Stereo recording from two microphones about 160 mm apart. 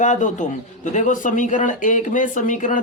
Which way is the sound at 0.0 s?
50° left (ahead or behind).